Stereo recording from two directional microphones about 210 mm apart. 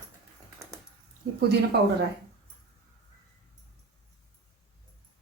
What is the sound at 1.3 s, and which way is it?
Speech, 50° right (ahead or behind).